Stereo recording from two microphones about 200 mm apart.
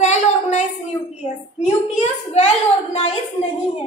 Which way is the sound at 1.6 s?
35° left (ahead or behind).